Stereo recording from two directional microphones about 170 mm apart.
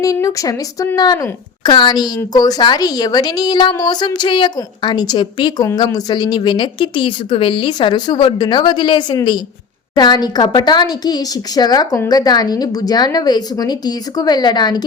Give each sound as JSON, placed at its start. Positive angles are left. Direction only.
{"t": 0.0, "sound": "a woman's voice", "side_deg": 20}